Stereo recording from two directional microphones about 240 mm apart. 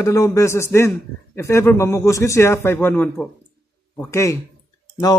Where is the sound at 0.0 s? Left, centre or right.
Centre.